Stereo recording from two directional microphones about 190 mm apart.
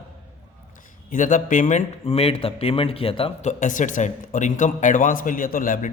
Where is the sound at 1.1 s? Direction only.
45° left (ahead or behind).